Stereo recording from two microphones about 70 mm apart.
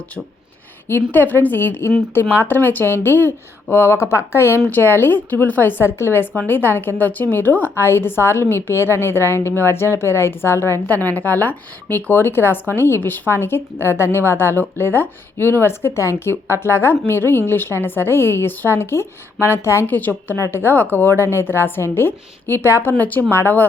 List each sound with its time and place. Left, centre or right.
1.1 s a woman's voice: left
10.8 s speech: left
19.9 s a woman's voice: left